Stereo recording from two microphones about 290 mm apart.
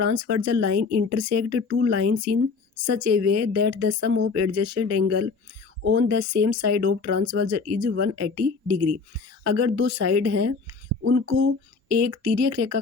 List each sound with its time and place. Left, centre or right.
0.0 s speech: right